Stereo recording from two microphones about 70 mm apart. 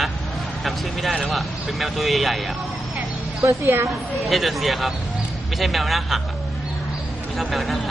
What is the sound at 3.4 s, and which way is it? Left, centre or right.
Speech, right.